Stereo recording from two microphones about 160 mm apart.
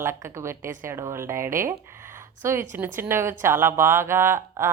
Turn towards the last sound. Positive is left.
turn(degrees=-15)  # may be behind; listen again after turning